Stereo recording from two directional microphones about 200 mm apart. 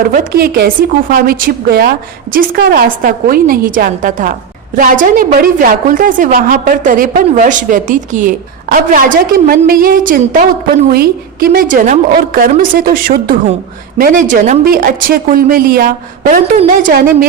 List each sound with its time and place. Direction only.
0.0 s a woman's voice: 45° right (ahead or behind)